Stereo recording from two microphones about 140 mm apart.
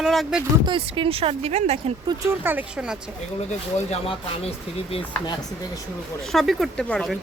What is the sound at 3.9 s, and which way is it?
Speech, 45° left (ahead or behind).